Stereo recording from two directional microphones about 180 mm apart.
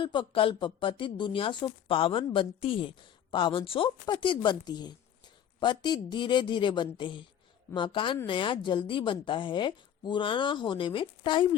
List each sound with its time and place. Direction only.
0.0 s speech: 25° left (ahead or behind)